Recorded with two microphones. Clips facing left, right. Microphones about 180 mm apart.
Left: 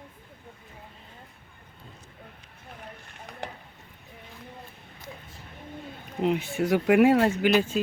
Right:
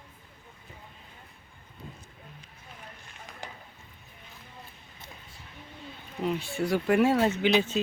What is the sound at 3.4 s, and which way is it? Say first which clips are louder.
Chop: left 6 dB; 65° left (ahead or behind).